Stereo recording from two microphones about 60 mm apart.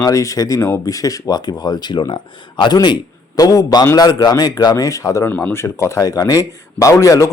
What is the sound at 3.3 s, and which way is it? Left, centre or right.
Speech, left.